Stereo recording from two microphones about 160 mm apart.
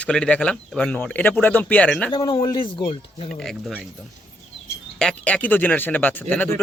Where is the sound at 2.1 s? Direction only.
30° left (ahead or behind).